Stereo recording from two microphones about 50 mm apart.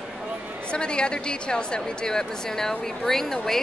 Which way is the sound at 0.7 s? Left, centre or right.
Centre.